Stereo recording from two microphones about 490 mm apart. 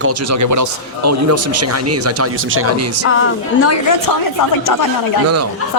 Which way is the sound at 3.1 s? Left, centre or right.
Left.